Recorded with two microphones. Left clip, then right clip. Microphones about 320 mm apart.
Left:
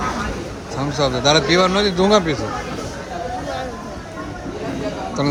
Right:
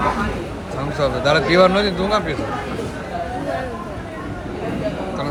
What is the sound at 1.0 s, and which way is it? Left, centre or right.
Speech, centre.